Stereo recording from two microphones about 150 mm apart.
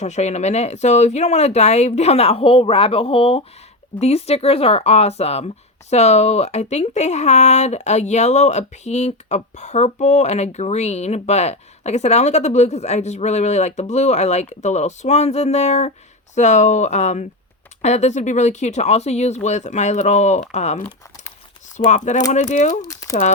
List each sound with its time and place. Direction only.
0.0 s speech: 50° left (ahead or behind)
21.8 s speech: 55° left (ahead or behind)
22.9 s crumpling: 25° left (ahead or behind)